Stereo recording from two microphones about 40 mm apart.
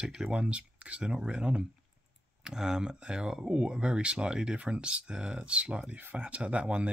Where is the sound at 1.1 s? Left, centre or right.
Right.